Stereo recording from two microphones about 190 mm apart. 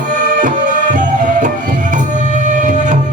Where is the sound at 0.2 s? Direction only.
45° right (ahead or behind).